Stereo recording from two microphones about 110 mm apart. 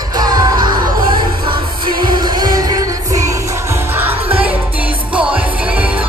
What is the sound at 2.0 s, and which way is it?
Music, 45° right (ahead or behind).